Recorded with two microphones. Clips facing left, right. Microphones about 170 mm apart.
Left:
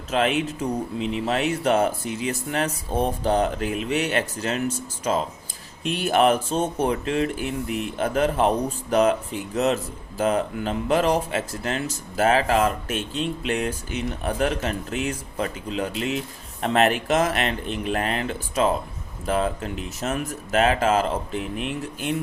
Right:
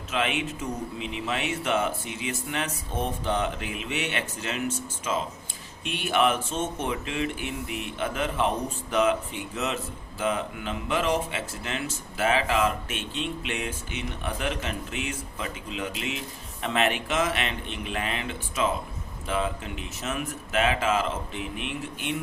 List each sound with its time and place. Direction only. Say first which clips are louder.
0.1 s speech: left 6 dB; 40° left (ahead or behind)